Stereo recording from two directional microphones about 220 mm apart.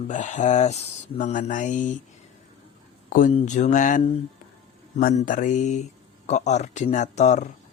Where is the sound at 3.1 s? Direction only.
35° left (ahead or behind).